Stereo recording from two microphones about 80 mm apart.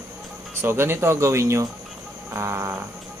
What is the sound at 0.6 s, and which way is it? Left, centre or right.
Speech, right.